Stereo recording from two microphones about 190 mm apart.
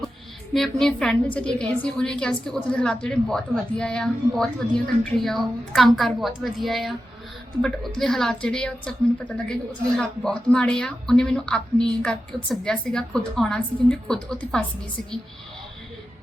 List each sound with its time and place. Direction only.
0.5 s a woman's voice: centre (ahead or behind)
10.0 s a woman's voice: 5° left (ahead or behind)